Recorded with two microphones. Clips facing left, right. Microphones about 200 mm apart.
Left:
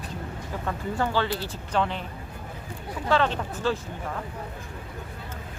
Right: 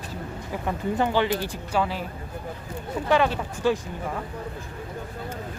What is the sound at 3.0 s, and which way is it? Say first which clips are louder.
Speech: right 2 dB; 15° right (ahead or behind).